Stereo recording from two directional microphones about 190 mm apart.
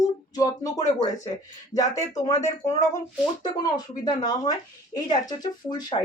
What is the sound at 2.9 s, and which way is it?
Speech, 20° left (ahead or behind).